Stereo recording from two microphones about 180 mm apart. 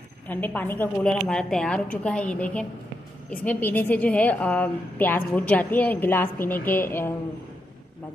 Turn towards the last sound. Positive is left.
turn(degrees=10)  # may be behind; listen again after turning